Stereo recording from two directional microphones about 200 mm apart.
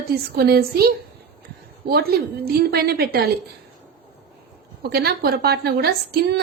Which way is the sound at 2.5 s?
50° right (ahead or behind).